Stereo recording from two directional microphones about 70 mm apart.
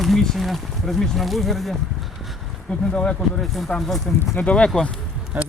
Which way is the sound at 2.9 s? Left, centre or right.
Centre.